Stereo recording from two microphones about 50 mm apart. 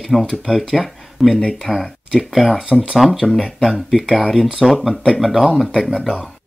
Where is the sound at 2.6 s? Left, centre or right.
Centre.